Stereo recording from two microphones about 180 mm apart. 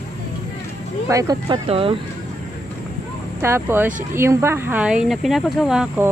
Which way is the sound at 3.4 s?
15° right (ahead or behind).